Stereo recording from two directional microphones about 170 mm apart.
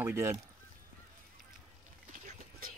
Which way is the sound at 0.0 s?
10° right (ahead or behind).